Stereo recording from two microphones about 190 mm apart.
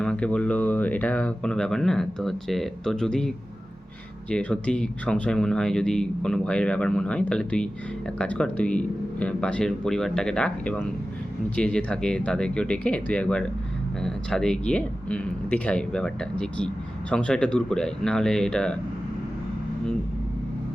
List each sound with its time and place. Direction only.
0.0 s speech: 5° left (ahead or behind)